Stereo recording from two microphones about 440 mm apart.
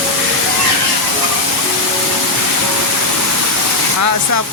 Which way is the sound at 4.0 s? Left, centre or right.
Right.